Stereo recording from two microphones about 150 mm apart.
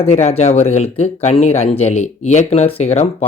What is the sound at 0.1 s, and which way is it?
Speech, 45° left (ahead or behind).